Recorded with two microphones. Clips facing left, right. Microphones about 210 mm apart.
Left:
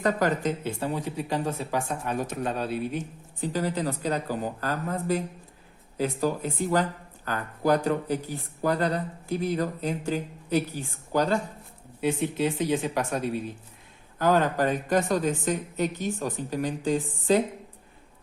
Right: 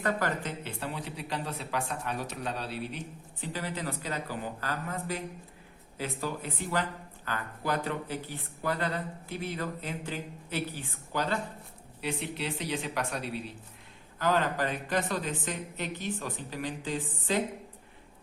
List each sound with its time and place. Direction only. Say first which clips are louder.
0.0 s speech: left 6 dB; 40° left (ahead or behind)